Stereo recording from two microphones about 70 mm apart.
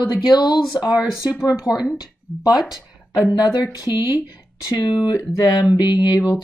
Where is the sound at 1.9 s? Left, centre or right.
Left.